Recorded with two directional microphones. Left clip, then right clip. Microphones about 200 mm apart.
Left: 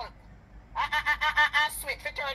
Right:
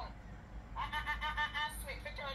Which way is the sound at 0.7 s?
45° left (ahead or behind).